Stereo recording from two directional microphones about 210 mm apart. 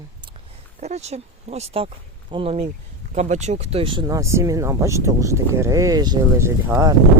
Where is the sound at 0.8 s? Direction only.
35° right (ahead or behind).